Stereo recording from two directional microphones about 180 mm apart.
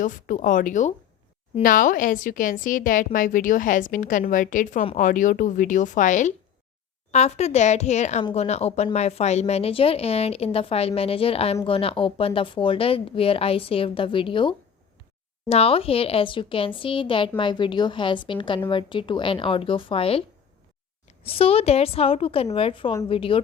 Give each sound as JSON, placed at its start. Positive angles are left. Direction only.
{"t": 0.0, "sound": "a woman's voice", "side_deg": 45}
{"t": 21.2, "sound": "a woman's voice", "side_deg": 30}